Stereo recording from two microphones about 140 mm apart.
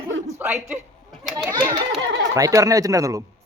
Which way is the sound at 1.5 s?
30° right (ahead or behind).